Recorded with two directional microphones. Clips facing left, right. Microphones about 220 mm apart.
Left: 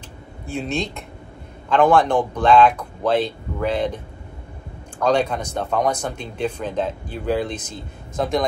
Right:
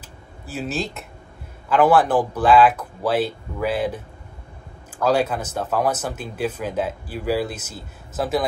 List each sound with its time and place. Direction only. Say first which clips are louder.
0.5 s speech: left 2 dB; 5° right (ahead or behind)